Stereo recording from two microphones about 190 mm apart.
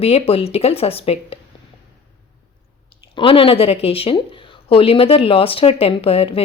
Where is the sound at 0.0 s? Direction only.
30° left (ahead or behind).